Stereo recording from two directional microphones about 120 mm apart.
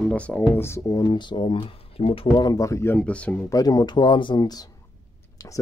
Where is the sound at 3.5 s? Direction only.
30° left (ahead or behind).